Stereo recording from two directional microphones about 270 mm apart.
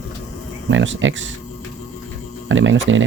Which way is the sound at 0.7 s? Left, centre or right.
Right.